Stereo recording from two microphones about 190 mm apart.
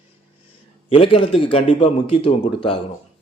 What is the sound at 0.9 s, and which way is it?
A man's voice, 30° left (ahead or behind).